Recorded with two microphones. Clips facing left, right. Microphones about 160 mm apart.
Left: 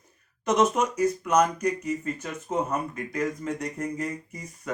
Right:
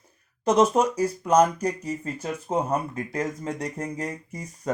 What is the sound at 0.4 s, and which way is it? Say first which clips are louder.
Speech: right 3 dB; 30° right (ahead or behind).